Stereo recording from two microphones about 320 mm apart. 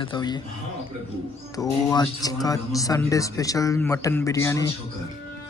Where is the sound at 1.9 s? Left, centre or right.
Centre.